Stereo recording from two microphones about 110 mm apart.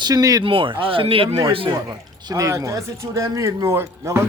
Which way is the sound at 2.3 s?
30° right (ahead or behind).